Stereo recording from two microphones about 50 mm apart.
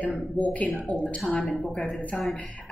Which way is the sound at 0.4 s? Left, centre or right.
Left.